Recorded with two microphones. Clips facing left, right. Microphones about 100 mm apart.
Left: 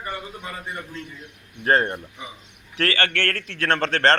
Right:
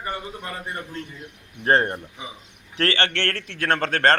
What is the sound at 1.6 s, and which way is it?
A man's voice, 30° right (ahead or behind).